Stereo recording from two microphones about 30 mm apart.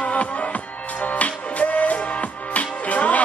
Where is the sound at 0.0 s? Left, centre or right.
Left.